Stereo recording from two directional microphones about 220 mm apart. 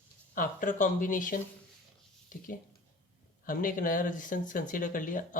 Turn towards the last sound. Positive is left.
turn(degrees=35)  # may be behind; listen again after turning